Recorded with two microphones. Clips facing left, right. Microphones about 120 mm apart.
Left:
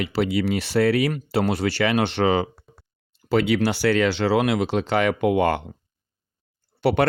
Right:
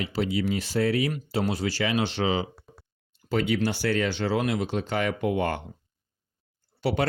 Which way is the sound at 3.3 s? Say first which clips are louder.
Left 5 dB; 90° left.